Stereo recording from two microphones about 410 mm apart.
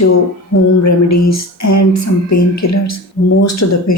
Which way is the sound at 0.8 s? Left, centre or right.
Left.